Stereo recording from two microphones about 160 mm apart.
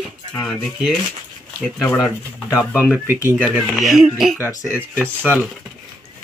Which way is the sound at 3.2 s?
10° right (ahead or behind).